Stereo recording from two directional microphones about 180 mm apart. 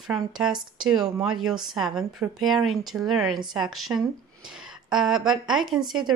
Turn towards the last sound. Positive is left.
turn(degrees=0)  # may be behind; listen again after turning